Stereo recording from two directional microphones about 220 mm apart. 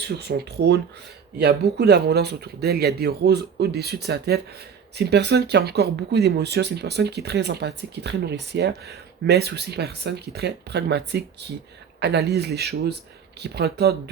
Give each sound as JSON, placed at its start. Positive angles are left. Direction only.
{"t": 0.0, "sound": "speech", "side_deg": -45}